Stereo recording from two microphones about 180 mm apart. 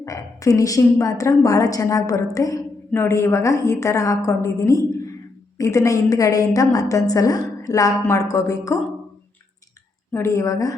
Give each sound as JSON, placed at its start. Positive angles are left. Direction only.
{"t": 0.0, "sound": "a woman's voice", "side_deg": 20}
{"t": 10.1, "sound": "a woman's voice", "side_deg": 15}